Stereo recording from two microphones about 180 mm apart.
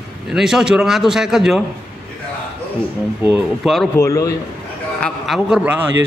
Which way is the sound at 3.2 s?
5° right (ahead or behind).